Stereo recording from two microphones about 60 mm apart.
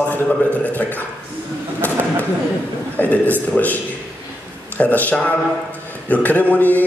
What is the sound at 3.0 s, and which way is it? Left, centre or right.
A man's voice, left.